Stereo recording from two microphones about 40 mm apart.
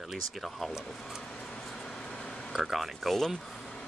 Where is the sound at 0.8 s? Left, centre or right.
Centre.